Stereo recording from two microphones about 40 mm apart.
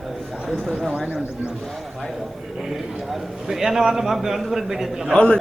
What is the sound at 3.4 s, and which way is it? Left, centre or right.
A man's voice, centre.